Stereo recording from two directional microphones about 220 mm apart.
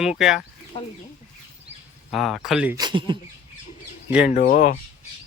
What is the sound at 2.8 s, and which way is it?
Speech, 20° right (ahead or behind).